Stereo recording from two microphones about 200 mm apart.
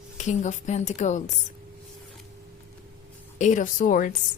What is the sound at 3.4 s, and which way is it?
Speech, 40° left (ahead or behind).